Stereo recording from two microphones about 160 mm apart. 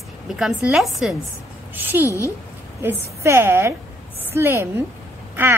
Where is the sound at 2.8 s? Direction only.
15° right (ahead or behind).